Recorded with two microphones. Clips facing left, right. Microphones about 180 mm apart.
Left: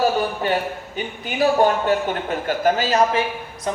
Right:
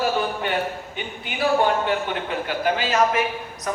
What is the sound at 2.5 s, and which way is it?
Speech, 45° left (ahead or behind).